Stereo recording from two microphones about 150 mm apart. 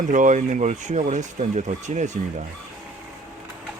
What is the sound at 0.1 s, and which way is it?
Speech, 60° right (ahead or behind).